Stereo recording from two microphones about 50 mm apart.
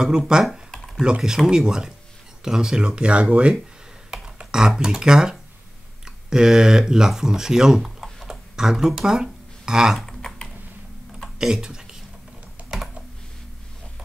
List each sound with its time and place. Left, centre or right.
0.5 s computer keyboard: centre
1.0 s speech: centre
4.4 s speech: centre
10.0 s typing: centre
11.3 s a sound: centre